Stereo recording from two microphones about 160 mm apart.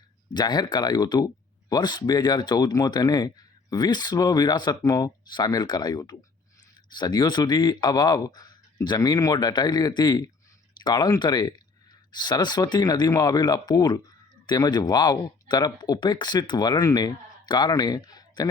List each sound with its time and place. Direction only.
0.3 s speech: 25° left (ahead or behind)